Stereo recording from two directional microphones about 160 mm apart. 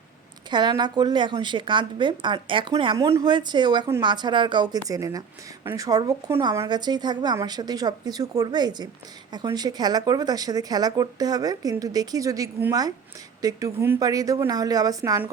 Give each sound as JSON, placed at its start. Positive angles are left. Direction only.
{"t": 0.5, "sound": "a woman's voice", "side_deg": -25}